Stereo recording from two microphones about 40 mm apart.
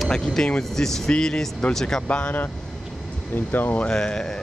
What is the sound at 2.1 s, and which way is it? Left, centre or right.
Speech, left.